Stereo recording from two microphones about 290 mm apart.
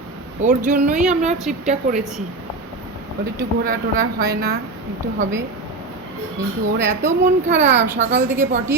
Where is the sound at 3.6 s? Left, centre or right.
Right.